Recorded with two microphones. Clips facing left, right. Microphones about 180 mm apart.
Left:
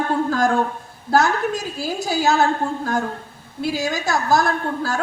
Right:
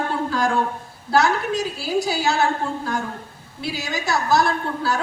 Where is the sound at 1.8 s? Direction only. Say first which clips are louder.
Left 3 dB; 50° left (ahead or behind).